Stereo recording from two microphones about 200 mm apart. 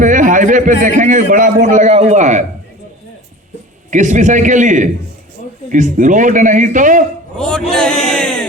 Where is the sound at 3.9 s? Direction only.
40° right (ahead or behind).